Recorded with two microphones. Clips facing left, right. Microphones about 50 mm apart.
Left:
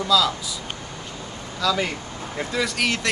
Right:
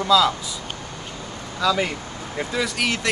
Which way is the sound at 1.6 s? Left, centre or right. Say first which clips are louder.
Right 2 dB; centre.